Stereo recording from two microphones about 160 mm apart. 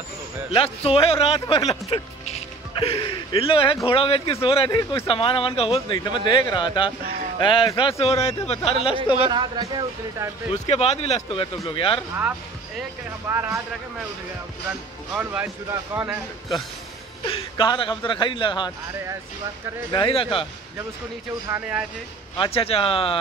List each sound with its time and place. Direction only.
0.5 s speech: 35° left (ahead or behind)
2.8 s speech: 35° left (ahead or behind)
4.6 s speech: 20° left (ahead or behind)
5.0 s speech: 35° left (ahead or behind)
8.0 s speech: 40° left (ahead or behind)
9.3 s speech: 25° right (ahead or behind)
10.5 s speech: 40° left (ahead or behind)
13.3 s speech: 15° right (ahead or behind)
15.7 s speech: 15° right (ahead or behind)
17.2 s speech: 30° left (ahead or behind)
19.9 s speech: 30° left (ahead or behind)
21.5 s speech: 10° right (ahead or behind)
22.4 s speech: 35° left (ahead or behind)